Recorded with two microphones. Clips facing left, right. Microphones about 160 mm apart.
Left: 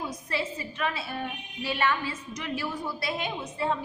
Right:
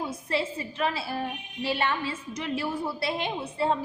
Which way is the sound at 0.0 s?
30° right (ahead or behind).